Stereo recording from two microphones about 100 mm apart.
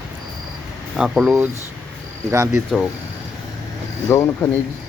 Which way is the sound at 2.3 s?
30° right (ahead or behind).